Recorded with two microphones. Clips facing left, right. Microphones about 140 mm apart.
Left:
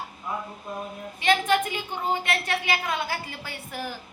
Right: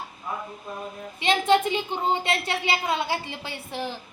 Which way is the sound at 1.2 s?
25° right (ahead or behind).